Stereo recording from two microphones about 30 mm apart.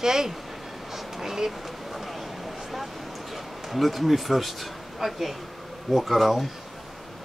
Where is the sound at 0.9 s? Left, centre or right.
Centre.